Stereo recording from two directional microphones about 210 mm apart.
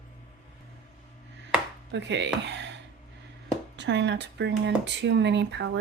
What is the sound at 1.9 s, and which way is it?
Speech, 55° right (ahead or behind).